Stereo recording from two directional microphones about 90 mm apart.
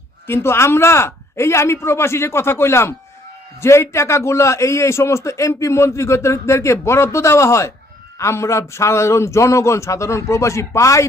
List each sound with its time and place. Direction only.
0.3 s a man's voice: 30° left (ahead or behind)